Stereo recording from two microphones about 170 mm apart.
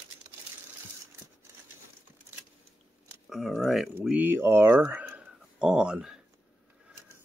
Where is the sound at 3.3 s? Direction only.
Centre (ahead or behind).